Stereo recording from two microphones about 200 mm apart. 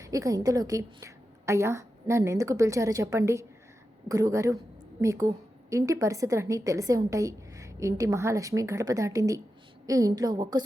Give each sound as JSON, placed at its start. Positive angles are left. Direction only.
{"t": 0.0, "sound": "a woman's voice", "side_deg": -15}